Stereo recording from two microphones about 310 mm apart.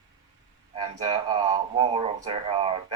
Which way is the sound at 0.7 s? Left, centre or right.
Centre.